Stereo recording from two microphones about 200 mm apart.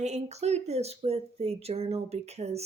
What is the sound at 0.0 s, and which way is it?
Speech, 35° right (ahead or behind).